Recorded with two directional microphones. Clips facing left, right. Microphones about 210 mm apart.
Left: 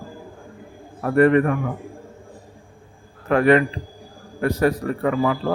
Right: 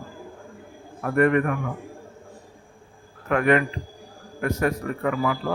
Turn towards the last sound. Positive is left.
turn(degrees=35)  # may be behind; listen again after turning